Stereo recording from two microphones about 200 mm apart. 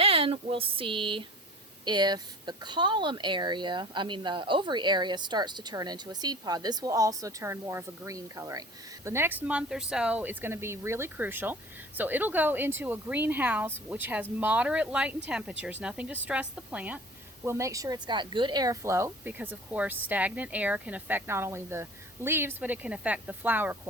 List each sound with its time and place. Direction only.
0.0 s a woman's voice: 30° right (ahead or behind); by 23.9 s 10° right (ahead or behind)